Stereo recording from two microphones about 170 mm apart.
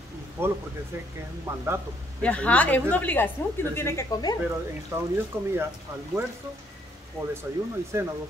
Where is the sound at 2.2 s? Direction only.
10° left (ahead or behind).